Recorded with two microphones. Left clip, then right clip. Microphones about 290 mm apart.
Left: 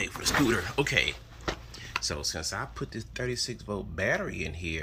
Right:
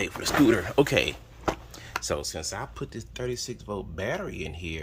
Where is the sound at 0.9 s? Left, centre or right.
Right.